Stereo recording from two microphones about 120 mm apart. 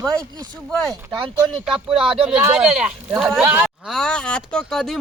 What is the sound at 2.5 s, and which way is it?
Speech, 5° right (ahead or behind).